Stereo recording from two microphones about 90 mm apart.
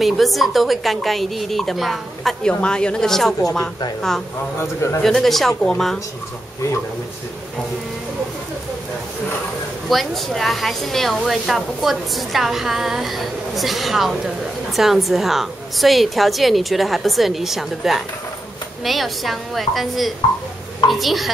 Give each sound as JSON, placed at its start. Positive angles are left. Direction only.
{"t": 0.0, "sound": "speech", "side_deg": 0}
{"t": 4.6, "sound": "a man's voice", "side_deg": 35}
{"t": 5.0, "sound": "speech", "side_deg": 5}
{"t": 9.8, "sound": "speech", "side_deg": 0}